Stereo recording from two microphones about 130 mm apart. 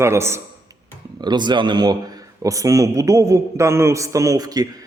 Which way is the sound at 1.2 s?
35° right (ahead or behind).